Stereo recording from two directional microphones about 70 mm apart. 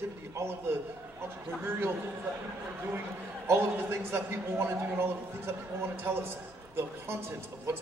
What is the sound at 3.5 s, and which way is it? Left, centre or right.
A man's voice, right.